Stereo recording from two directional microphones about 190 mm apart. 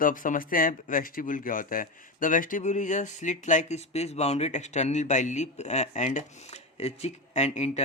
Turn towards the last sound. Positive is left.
turn(degrees=35)  # may be behind; listen again after turning